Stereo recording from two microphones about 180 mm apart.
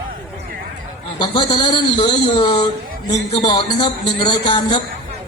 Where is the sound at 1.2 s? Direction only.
25° left (ahead or behind).